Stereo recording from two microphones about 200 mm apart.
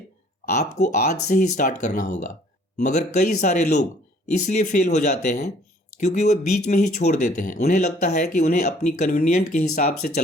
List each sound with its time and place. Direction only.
0.5 s speech: 35° left (ahead or behind)